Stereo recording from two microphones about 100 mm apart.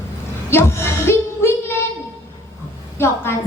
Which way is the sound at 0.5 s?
25° left (ahead or behind).